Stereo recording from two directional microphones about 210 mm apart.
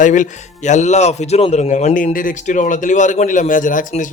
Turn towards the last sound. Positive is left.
turn(degrees=40)  # may be behind; listen again after turning